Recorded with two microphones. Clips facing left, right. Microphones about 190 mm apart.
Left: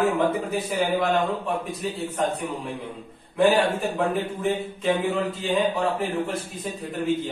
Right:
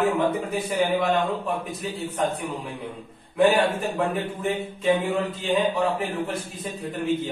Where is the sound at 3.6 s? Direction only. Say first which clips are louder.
Even; centre (ahead or behind).